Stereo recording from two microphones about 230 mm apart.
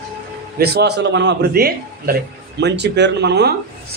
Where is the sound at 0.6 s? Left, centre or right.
Right.